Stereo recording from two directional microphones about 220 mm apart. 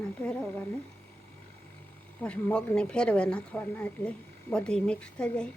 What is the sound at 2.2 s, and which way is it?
Speech, 5° left (ahead or behind).